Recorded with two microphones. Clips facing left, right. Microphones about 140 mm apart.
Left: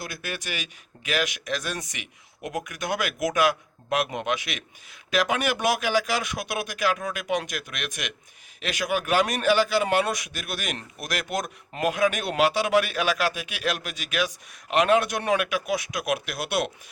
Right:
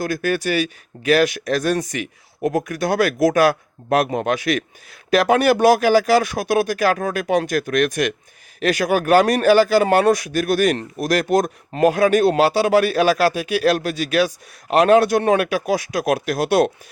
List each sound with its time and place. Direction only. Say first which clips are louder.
0.0 s speech: right 14 dB; 45° right (ahead or behind)